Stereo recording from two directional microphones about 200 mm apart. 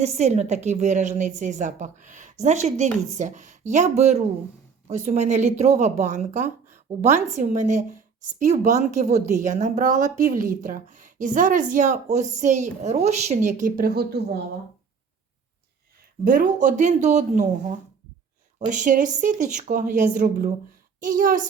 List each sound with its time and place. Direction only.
0.0 s speech: 35° right (ahead or behind)
16.2 s a child's voice: 40° right (ahead or behind)